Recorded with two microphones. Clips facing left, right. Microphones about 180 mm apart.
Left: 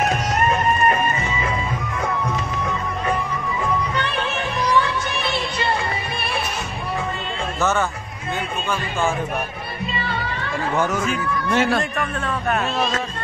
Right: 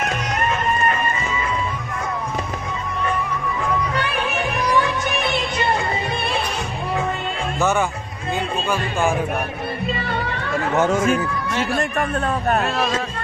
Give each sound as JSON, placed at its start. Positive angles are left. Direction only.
{"t": 10.8, "sound": "speech", "side_deg": -25}
{"t": 12.0, "sound": "a man's voice", "side_deg": -40}